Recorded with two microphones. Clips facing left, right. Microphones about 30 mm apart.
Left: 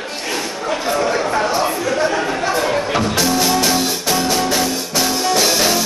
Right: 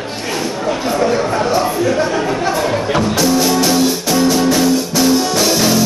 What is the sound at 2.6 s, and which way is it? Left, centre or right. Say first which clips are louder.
Music: right 2 dB; centre.